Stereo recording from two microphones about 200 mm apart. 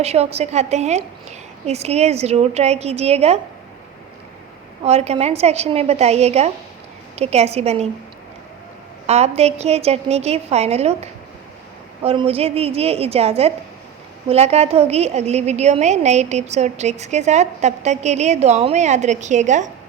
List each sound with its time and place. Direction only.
0.0 s a woman's voice: 30° right (ahead or behind)
4.8 s a woman's voice: 30° right (ahead or behind)
9.0 s a woman's voice: 30° right (ahead or behind)